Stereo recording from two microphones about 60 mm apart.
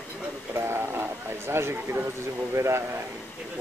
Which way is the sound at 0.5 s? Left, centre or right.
Right.